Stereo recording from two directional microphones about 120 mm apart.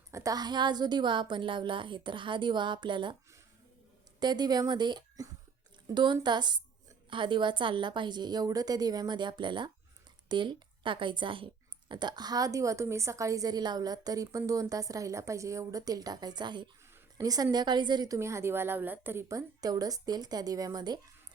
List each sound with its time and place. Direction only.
0.1 s a woman's voice: 30° right (ahead or behind)
4.2 s a woman's voice: 35° right (ahead or behind)
18.2 s a woman's voice: 25° right (ahead or behind)